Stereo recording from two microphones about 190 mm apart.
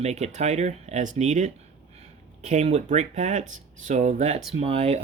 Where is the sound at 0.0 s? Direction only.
35° right (ahead or behind).